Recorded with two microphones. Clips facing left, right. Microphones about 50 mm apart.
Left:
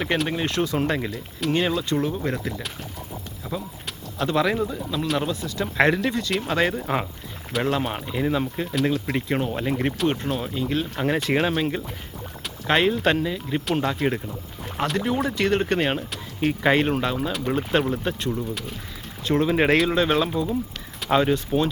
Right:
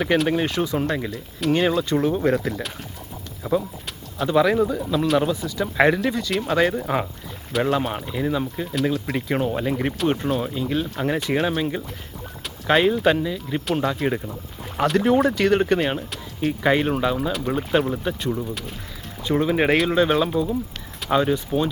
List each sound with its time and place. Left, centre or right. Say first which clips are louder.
0.0 s speech: right 4 dB; centre
0.9 s speech: even; centre
1.8 s speech: right 4 dB; right
2.3 s speech: right 6 dB; centre
3.4 s clip-clop: right 9 dB; centre
4.2 s speech: right 4 dB; centre
8.7 s speech: even; centre
14.9 s speech: right 7 dB; right
16.6 s speech: right 1 dB; centre